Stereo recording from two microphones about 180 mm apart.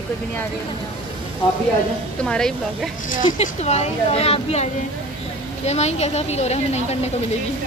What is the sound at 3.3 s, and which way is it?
A woman's voice, 35° left (ahead or behind).